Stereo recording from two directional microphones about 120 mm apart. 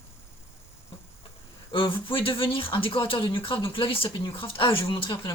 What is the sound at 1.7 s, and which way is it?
Speech, 45° left (ahead or behind).